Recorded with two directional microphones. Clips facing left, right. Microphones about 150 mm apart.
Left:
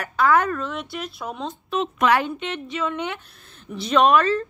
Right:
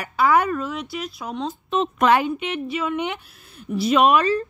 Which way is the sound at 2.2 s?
10° right (ahead or behind).